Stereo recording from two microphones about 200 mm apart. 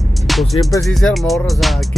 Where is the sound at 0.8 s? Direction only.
Centre (ahead or behind).